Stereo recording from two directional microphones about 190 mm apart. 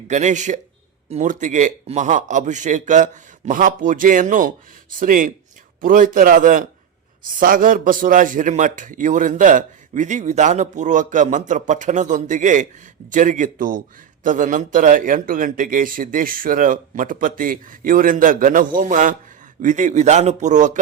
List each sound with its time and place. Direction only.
0.1 s a man's voice: 40° right (ahead or behind)